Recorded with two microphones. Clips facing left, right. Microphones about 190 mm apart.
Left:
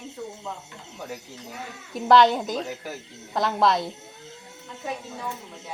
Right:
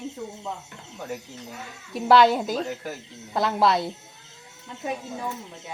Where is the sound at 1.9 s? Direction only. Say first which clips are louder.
Even; 5° right (ahead or behind).